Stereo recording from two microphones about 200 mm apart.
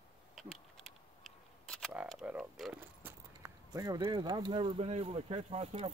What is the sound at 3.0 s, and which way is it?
Speech, 15° right (ahead or behind).